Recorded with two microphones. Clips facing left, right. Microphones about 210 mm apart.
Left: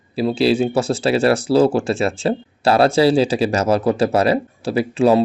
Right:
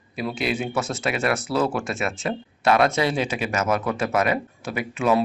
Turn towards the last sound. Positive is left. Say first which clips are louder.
# left 7 dB
turn(degrees=35)  # may be behind; listen again after turning